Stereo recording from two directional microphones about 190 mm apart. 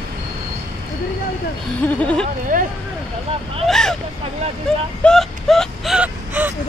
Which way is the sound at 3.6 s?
Centre (ahead or behind).